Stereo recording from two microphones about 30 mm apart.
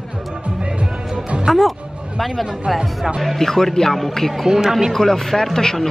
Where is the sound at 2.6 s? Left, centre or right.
Centre.